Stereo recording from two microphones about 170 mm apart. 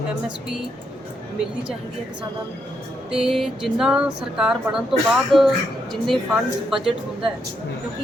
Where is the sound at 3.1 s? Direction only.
5° right (ahead or behind).